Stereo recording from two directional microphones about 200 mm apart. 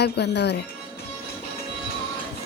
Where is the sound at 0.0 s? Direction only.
55° left (ahead or behind).